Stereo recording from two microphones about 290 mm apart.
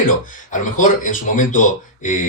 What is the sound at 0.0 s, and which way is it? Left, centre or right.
Speech, left.